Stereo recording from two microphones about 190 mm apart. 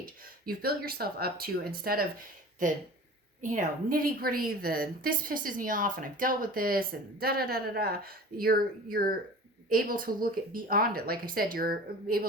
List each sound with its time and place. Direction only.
0.4 s a woman's voice: 55° right (ahead or behind)